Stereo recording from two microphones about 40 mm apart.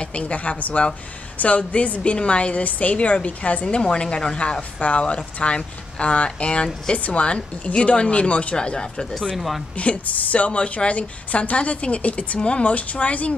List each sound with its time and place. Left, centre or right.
0.0 s a woman's voice: left
3.6 s speech: left
7.0 s a woman's voice: left
8.5 s speech: left
9.3 s a woman's voice: centre
9.8 s a woman's voice: left